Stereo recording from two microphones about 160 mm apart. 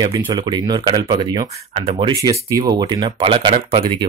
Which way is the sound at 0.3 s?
25° right (ahead or behind).